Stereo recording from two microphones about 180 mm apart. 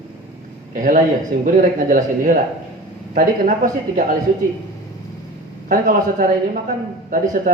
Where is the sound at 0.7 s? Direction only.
50° right (ahead or behind).